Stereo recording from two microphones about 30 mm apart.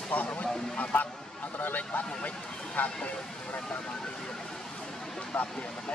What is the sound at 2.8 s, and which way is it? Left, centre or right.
Speech, left.